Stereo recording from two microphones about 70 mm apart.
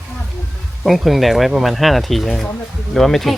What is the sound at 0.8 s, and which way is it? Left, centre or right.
Speech, centre.